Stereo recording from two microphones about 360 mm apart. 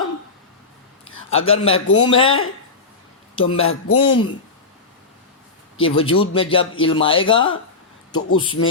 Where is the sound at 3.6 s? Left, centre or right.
Left.